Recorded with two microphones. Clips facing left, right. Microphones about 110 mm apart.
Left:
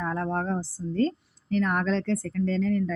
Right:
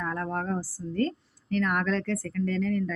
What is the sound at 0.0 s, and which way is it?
Speech, 20° left (ahead or behind).